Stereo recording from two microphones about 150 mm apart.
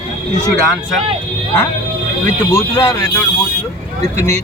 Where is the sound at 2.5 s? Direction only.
15° left (ahead or behind).